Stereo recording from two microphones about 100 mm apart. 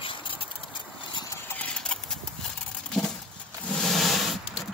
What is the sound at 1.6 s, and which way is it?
Clip-clop, 10° left (ahead or behind).